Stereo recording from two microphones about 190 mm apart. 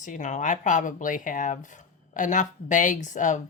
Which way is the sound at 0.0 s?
40° left (ahead or behind).